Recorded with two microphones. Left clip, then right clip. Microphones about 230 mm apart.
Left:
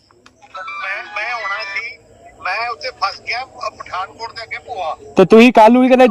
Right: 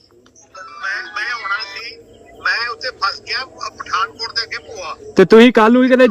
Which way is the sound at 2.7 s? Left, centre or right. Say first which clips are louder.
Right 1 dB; centre.